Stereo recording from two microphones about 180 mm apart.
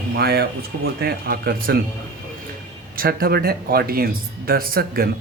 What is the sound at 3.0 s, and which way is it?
Speech, 55° right (ahead or behind).